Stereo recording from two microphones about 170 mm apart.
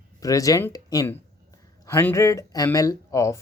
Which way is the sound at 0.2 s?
20° left (ahead or behind).